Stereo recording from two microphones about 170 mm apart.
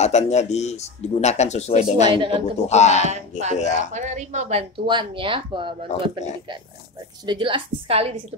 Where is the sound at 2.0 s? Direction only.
30° right (ahead or behind).